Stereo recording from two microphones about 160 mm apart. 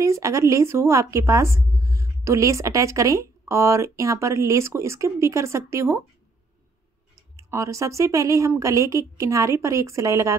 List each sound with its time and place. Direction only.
0.0 s a woman's voice: 20° right (ahead or behind)
7.3 s a woman's voice: 20° right (ahead or behind)